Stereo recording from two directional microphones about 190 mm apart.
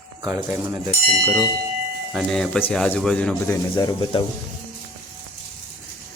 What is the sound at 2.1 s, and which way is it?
Speech, centre (ahead or behind).